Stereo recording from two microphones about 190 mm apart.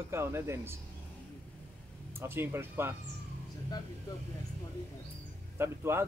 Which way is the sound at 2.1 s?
10° right (ahead or behind).